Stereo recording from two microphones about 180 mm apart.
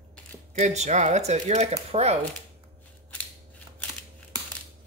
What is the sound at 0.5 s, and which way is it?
Speech, 40° right (ahead or behind).